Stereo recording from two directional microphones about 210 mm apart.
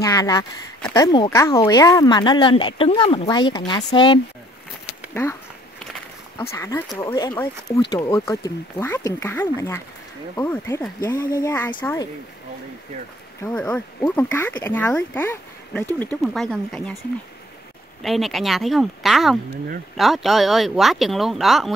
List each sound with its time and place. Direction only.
0.0 s speech: 15° left (ahead or behind)
5.1 s a sound: 10° left (ahead or behind)
6.5 s speech: 15° left (ahead or behind)
13.4 s speech: 10° left (ahead or behind)
18.0 s speech: centre (ahead or behind)